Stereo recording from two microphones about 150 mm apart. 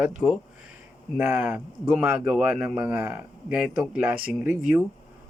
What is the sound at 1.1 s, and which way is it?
Speech, 10° right (ahead or behind).